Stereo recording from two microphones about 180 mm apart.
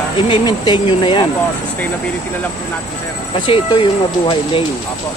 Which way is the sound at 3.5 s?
30° left (ahead or behind).